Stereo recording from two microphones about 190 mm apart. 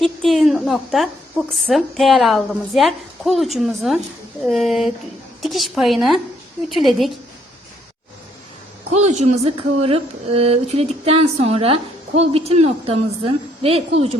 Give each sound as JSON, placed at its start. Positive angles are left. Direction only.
{"t": 0.0, "sound": "a woman's voice", "side_deg": 0}
{"t": 8.9, "sound": "a woman's voice", "side_deg": -35}